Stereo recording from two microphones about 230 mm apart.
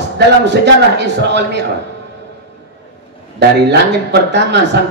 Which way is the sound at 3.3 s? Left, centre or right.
Right.